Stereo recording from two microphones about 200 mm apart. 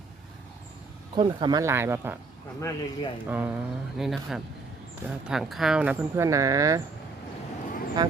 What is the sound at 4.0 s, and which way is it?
Speech, centre (ahead or behind).